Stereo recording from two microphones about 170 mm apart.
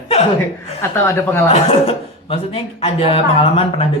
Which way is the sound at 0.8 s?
15° left (ahead or behind).